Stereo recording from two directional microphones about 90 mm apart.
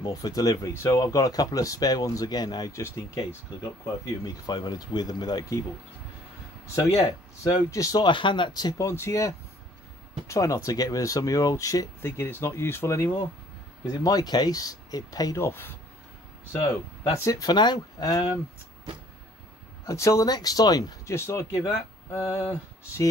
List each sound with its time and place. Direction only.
0.0 s speech: 45° left (ahead or behind)
2.7 s speech: 30° left (ahead or behind)
4.5 s speech: 50° left (ahead or behind)
7.4 s speech: 40° left (ahead or behind)
8.0 s speech: 65° left (ahead or behind)
8.7 s speech: 35° left (ahead or behind)
12.0 s speech: 25° left (ahead or behind)
13.8 s speech: 45° left (ahead or behind)
15.3 s speech: 30° left (ahead or behind)
17.2 s speech: 40° left (ahead or behind)
19.8 s speech: 35° left (ahead or behind)
21.1 s speech: 30° left (ahead or behind)